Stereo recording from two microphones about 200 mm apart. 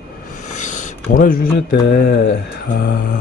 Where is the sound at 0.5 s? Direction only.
40° left (ahead or behind).